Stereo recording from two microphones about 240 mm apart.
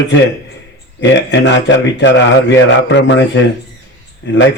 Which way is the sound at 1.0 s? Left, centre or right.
Left.